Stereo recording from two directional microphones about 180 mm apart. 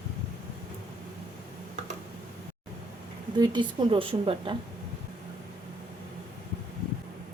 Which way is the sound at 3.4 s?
25° right (ahead or behind).